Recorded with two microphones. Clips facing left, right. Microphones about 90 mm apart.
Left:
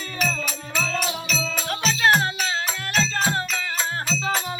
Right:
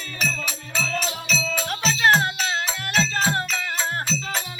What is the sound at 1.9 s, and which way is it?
Music, 30° right (ahead or behind).